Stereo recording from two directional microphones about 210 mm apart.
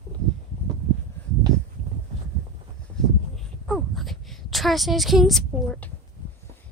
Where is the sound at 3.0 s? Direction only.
5° left (ahead or behind).